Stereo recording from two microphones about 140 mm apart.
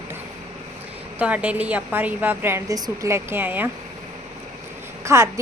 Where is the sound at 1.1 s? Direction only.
10° right (ahead or behind).